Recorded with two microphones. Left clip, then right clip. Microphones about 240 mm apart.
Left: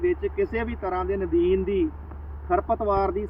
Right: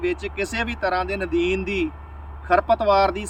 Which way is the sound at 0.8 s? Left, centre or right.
Right.